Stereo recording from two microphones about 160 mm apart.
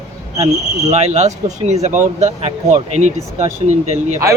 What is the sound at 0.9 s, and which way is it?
Speech, 45° right (ahead or behind).